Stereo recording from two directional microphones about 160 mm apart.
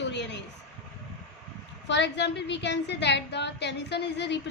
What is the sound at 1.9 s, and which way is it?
A woman's voice, 90° left.